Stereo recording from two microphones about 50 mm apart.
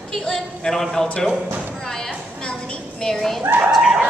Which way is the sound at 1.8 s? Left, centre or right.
Centre.